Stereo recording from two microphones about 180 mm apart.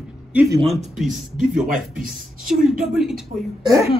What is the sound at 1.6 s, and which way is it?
Speech, 50° right (ahead or behind).